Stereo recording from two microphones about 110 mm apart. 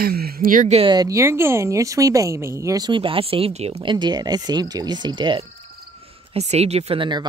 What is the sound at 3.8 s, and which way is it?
Speech, 45° right (ahead or behind).